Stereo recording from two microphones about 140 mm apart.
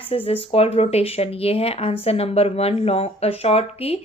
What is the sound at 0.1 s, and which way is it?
Speech, 45° left (ahead or behind).